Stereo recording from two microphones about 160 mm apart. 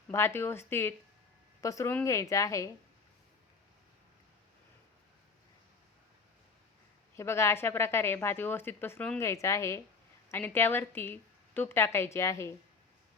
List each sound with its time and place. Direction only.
0.1 s a woman's voice: 15° left (ahead or behind)
7.2 s a woman's voice: 15° left (ahead or behind)